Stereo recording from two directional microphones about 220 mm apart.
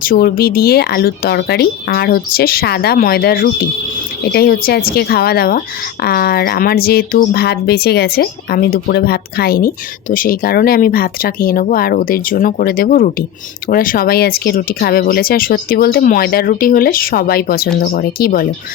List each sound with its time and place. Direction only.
0.0 s speech: 45° left (ahead or behind)